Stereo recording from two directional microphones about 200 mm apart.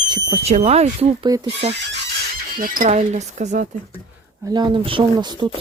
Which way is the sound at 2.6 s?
40° right (ahead or behind).